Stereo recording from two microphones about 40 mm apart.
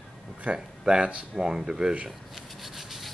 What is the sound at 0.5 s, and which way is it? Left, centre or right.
Speech, centre.